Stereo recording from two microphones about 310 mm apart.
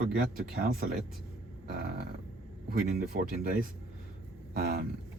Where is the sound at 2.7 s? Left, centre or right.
Right.